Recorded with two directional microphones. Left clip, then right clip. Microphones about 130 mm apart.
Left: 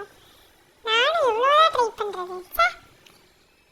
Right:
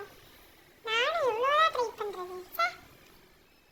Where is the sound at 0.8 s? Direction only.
45° left (ahead or behind).